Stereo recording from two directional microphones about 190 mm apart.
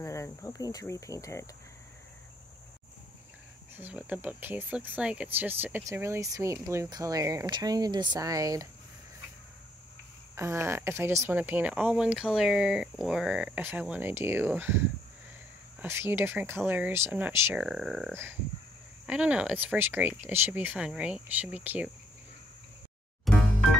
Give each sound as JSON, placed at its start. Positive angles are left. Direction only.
{"t": 0.0, "sound": "speech", "side_deg": 15}
{"t": 3.7, "sound": "speech", "side_deg": -10}
{"t": 10.3, "sound": "speech", "side_deg": -15}
{"t": 23.3, "sound": "music", "side_deg": 0}